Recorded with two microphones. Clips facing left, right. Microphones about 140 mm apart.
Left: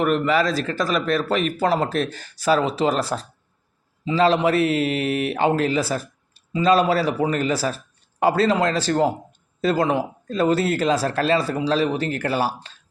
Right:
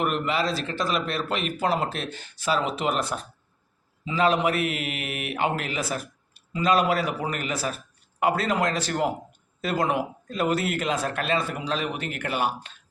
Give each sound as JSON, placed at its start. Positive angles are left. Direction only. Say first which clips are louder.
{"t": 0.0, "sound": "a man's voice", "louder": "left 6 dB", "side_deg": 40}